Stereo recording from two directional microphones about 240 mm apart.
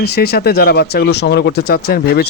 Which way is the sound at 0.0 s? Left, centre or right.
Left.